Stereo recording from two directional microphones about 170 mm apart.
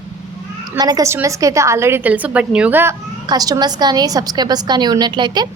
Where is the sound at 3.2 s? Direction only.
25° right (ahead or behind).